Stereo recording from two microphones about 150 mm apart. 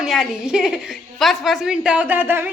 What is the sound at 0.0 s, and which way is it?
A woman's voice, centre (ahead or behind).